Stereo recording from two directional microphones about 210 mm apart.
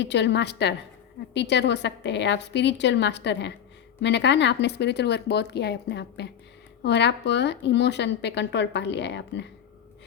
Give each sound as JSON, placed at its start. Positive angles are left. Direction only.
{"t": 0.0, "sound": "speech", "side_deg": 55}